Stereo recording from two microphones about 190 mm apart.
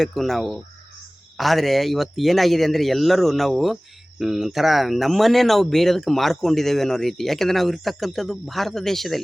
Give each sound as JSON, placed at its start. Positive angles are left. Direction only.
{"t": 0.0, "sound": "speech", "side_deg": 0}